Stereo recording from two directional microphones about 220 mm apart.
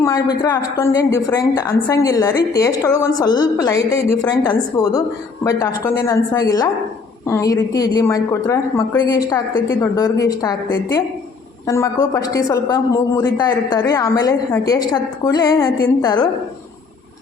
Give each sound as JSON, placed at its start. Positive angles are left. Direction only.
{"t": 0.0, "sound": "a woman's voice", "side_deg": 15}